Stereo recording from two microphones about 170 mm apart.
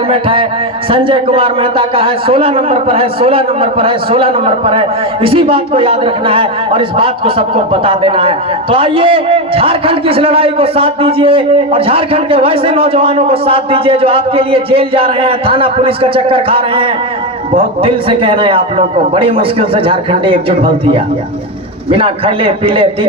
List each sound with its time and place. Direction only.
0.1 s a man's voice: 30° right (ahead or behind)